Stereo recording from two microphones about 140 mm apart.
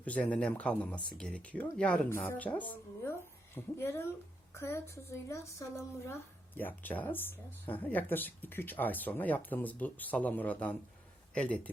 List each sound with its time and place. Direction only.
0.0 s speech: 10° left (ahead or behind)